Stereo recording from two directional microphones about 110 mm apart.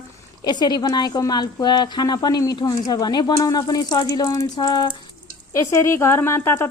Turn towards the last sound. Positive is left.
turn(degrees=20)  # may be behind; listen again after turning